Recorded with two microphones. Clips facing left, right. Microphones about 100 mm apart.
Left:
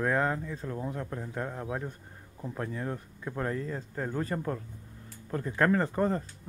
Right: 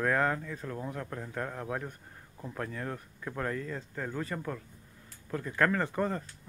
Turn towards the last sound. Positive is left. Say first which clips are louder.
# left 4 dB
turn(degrees=30)  # may be behind; listen again after turning